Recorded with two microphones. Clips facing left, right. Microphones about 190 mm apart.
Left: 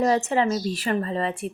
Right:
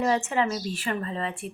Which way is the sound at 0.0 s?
40° left (ahead or behind).